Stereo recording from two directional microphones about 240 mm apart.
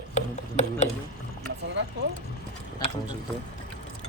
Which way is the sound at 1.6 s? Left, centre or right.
Right.